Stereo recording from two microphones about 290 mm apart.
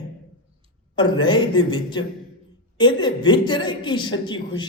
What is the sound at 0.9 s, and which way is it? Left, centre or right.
A woman's voice, centre.